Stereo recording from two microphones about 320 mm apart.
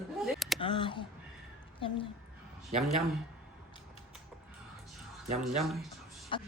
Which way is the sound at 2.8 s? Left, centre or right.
Centre.